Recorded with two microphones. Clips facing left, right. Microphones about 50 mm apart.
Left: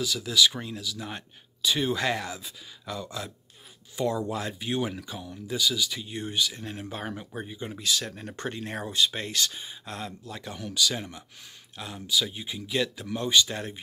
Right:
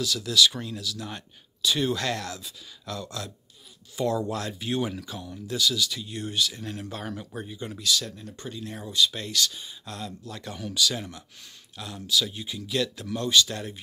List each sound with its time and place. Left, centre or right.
0.0 s speech: centre
3.9 s speech: centre
7.7 s speech: left
8.2 s speech: left
8.9 s speech: left
10.5 s speech: centre